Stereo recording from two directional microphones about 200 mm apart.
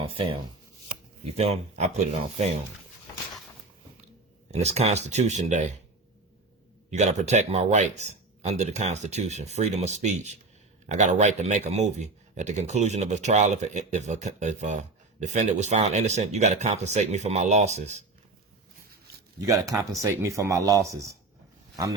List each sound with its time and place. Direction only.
0.0 s speech: 25° right (ahead or behind)
4.5 s speech: 35° right (ahead or behind)
6.9 s speech: 35° right (ahead or behind)
19.4 s speech: 15° right (ahead or behind)